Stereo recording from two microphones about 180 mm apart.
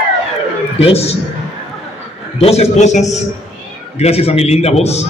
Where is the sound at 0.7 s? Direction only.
35° left (ahead or behind).